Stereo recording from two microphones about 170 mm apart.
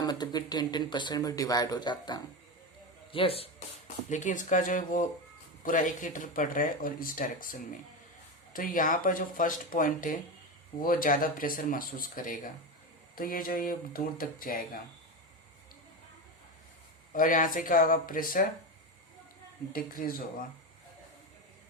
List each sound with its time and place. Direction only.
0.0 s speech: 25° left (ahead or behind); by 7.3 s 55° left (ahead or behind)
8.5 s speech: 55° left (ahead or behind)
17.1 s speech: 55° left (ahead or behind)
19.7 s speech: 55° left (ahead or behind)